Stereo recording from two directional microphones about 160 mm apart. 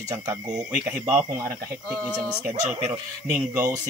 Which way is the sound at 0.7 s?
5° right (ahead or behind).